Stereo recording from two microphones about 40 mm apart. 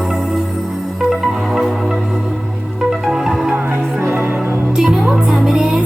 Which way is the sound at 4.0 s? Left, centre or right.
Right.